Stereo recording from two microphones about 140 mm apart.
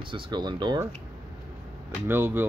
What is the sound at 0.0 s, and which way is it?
Speech, 35° right (ahead or behind).